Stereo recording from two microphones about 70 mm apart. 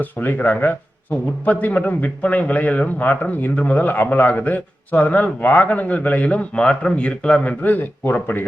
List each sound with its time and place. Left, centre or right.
0.0 s a man's voice: left